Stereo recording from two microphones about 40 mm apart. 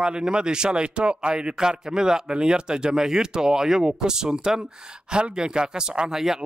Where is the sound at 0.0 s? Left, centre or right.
Right.